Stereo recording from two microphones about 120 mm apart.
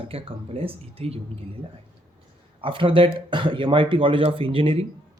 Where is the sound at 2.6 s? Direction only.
45° right (ahead or behind).